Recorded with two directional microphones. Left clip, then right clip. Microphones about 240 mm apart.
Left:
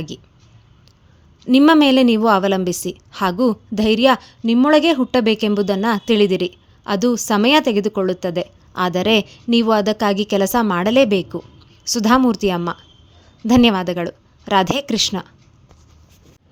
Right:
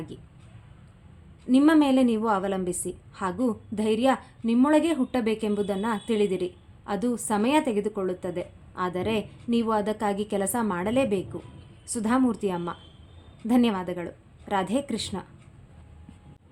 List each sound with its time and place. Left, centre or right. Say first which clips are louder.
1.5 s a woman's voice: left 8 dB; left